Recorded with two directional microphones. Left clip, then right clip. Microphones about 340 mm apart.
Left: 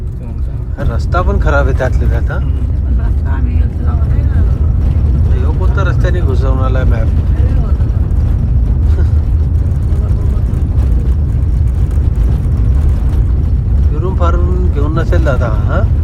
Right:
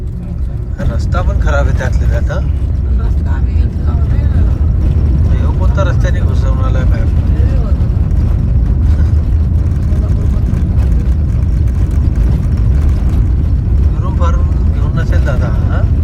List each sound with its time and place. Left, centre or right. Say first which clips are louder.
1.1 s speech: left 4 dB; centre
5.7 s speech: even; centre
14.0 s vehicle: left 4 dB; centre
14.9 s speech: left 4 dB; centre